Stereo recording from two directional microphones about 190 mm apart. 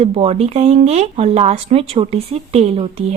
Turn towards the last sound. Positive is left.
turn(degrees=-35)  # may be behind; listen again after turning